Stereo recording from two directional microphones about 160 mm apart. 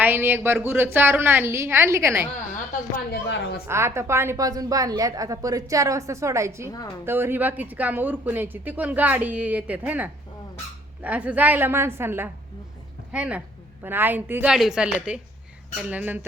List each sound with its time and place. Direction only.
0.0 s speech: 15° right (ahead or behind)
3.7 s a woman's voice: 15° right (ahead or behind)
6.7 s a woman's voice: 20° left (ahead or behind)
7.0 s speech: 15° right (ahead or behind)